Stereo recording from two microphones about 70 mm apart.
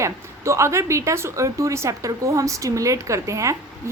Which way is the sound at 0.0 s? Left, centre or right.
Right.